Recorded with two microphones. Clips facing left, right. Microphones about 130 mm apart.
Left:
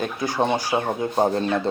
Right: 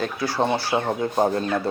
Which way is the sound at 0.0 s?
20° left (ahead or behind).